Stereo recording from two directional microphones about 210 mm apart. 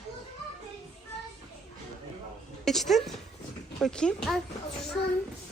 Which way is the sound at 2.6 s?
Centre (ahead or behind).